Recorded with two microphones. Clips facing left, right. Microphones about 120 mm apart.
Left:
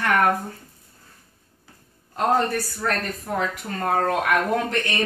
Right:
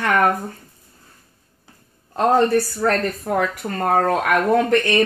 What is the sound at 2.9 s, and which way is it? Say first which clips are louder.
Speech: right 6 dB; 55° right (ahead or behind).